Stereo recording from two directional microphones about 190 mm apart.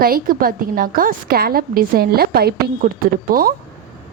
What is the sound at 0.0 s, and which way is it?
A woman's voice, 50° right (ahead or behind).